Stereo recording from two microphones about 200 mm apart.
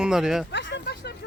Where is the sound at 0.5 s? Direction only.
60° left (ahead or behind).